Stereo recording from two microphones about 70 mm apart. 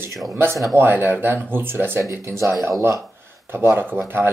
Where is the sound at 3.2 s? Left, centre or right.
Right.